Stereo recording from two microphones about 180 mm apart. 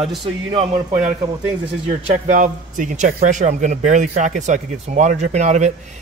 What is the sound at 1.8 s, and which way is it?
Speech, 40° right (ahead or behind).